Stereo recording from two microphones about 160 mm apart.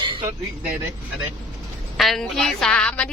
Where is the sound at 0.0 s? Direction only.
30° right (ahead or behind).